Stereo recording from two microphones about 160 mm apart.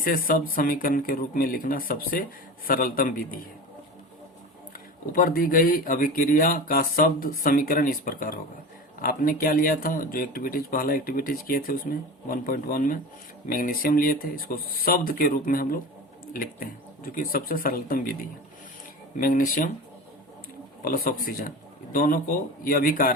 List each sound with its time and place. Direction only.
0.0 s speech: 60° left (ahead or behind)
5.1 s speech: 60° left (ahead or behind)
20.8 s speech: 60° left (ahead or behind)